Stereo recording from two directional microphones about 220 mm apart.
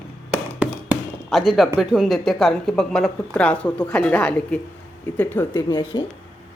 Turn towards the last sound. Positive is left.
turn(degrees=20)  # may be behind; listen again after turning